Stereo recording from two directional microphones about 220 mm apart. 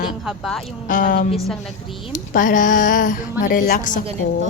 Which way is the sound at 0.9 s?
35° left (ahead or behind).